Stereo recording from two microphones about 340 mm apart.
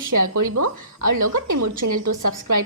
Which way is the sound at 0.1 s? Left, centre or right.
Right.